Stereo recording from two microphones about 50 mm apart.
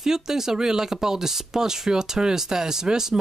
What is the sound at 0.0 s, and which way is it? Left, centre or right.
A woman's voice, centre.